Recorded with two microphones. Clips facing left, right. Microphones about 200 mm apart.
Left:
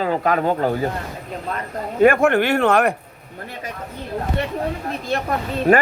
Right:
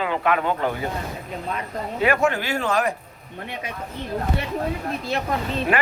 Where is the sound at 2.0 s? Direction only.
50° left (ahead or behind).